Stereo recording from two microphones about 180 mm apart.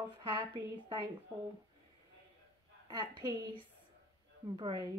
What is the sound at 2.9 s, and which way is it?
Speech, 25° right (ahead or behind).